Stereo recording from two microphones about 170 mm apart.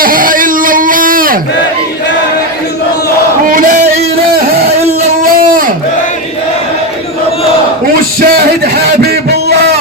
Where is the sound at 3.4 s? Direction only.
55° right (ahead or behind).